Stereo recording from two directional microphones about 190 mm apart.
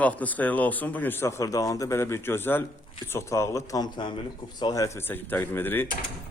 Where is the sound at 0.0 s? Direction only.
10° left (ahead or behind).